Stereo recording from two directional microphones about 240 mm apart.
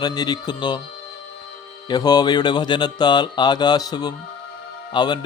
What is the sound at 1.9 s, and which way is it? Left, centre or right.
Speech, centre.